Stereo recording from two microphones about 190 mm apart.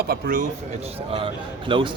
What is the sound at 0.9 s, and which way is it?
Speech, 30° right (ahead or behind).